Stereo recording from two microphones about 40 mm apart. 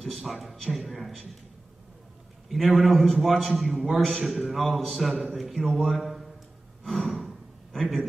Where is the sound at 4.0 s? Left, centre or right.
Centre.